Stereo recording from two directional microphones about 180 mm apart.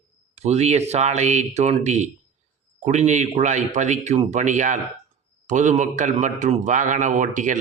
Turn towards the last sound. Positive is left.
turn(degrees=-45)  # may be behind; listen again after turning